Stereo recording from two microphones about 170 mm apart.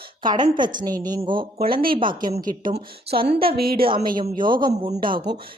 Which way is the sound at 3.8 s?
30° right (ahead or behind).